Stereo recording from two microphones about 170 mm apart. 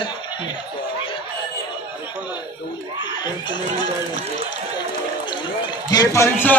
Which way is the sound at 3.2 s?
25° left (ahead or behind).